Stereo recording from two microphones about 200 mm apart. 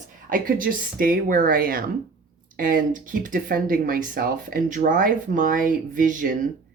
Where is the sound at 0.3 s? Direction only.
45° right (ahead or behind).